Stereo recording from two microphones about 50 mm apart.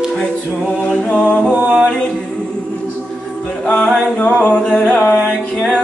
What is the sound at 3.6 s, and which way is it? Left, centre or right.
A capella, left.